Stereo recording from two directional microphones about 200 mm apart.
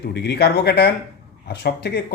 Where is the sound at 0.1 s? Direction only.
55° left (ahead or behind).